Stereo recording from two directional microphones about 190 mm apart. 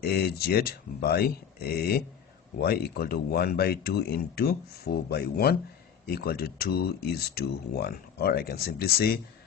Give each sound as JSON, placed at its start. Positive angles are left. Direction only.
{"t": 0.0, "sound": "speech", "side_deg": 55}